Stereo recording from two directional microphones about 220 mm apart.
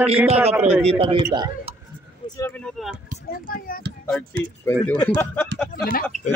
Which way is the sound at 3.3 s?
40° left (ahead or behind).